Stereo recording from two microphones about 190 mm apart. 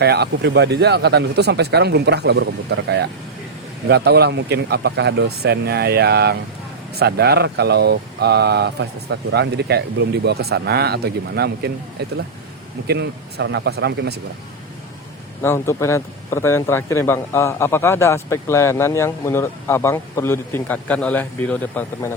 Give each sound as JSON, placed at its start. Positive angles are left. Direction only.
{"t": 0.0, "sound": "speech", "side_deg": -60}
{"t": 15.4, "sound": "speech", "side_deg": 15}